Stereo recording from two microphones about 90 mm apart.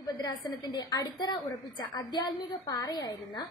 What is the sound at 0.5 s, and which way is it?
A woman's voice, 45° left (ahead or behind).